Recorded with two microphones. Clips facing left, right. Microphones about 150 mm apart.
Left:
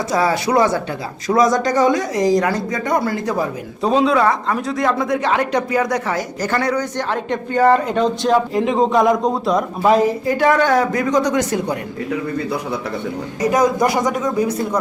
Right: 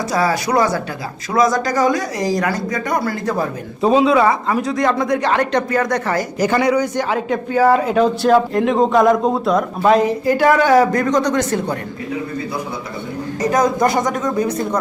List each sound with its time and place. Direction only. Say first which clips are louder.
0.1 s speech: left 1 dB; 20° left (ahead or behind)
1.3 s speech: left 1 dB; 35° left (ahead or behind); by 3.4 s 15° left (ahead or behind)
3.8 s speech: right 2 dB; 5° right (ahead or behind)
6.4 s speech: right 5 dB; 15° right (ahead or behind)
10.9 s speech: right 1 dB; 5° left (ahead or behind)
13.4 s speech: even; 10° left (ahead or behind)